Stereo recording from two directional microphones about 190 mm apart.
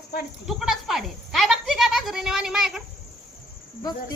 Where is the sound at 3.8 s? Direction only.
20° left (ahead or behind).